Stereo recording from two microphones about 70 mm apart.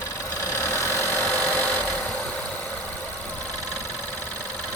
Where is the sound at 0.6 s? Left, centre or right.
Left.